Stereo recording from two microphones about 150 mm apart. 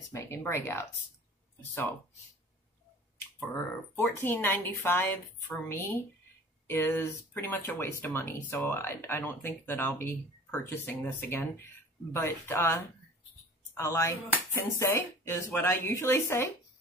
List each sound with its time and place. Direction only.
0.1 s speech: 20° left (ahead or behind)
3.9 s speech: 15° left (ahead or behind)